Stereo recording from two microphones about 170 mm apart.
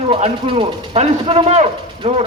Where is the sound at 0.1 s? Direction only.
35° right (ahead or behind).